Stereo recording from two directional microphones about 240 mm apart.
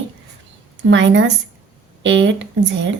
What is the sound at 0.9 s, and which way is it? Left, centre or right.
A woman's voice, right.